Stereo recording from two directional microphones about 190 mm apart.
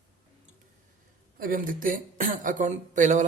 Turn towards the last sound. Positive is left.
turn(degrees=-40)  # may be behind; listen again after turning